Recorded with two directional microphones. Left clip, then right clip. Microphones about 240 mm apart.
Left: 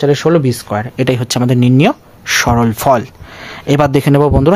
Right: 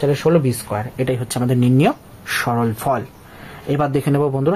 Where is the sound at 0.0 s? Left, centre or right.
Left.